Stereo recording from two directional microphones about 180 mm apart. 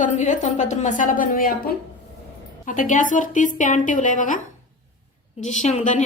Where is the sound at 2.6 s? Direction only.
45° left (ahead or behind).